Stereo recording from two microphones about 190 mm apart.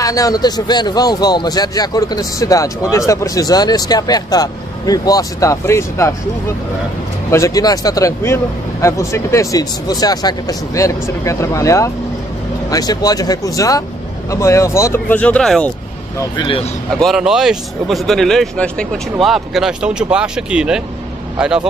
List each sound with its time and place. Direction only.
0.0 s speech: 20° left (ahead or behind)
7.2 s speech: 15° left (ahead or behind)
16.2 s speech: 25° left (ahead or behind)
17.0 s speech: centre (ahead or behind)